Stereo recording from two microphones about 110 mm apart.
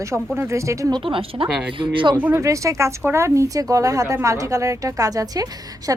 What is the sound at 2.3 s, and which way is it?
A woman's voice, 30° right (ahead or behind).